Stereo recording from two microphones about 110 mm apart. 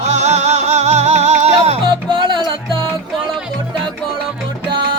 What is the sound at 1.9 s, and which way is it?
Music, 50° right (ahead or behind).